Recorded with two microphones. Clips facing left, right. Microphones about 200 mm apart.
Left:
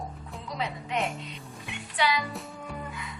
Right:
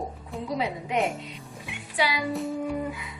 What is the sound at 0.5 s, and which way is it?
Speech, 15° right (ahead or behind).